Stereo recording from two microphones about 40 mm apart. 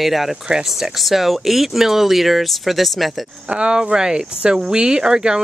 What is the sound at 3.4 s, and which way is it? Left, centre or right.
Speech, right.